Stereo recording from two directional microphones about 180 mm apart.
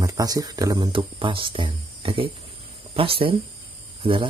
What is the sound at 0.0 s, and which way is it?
Speech, 20° right (ahead or behind).